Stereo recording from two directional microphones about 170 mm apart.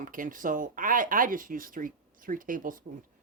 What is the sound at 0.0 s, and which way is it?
Speech, 55° right (ahead or behind).